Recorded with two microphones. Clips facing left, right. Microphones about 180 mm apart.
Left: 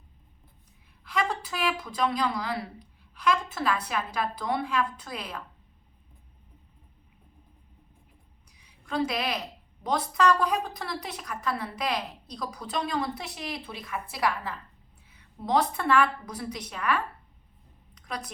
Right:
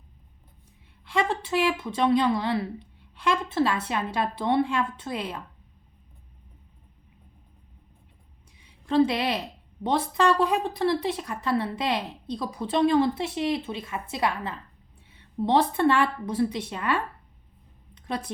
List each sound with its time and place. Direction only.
1.0 s a woman's voice: 25° right (ahead or behind)
8.6 s a woman's voice: 30° right (ahead or behind)
17.9 s a sound: 30° right (ahead or behind)